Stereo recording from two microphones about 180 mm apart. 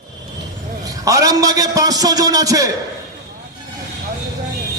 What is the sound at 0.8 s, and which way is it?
A man's voice, 20° right (ahead or behind).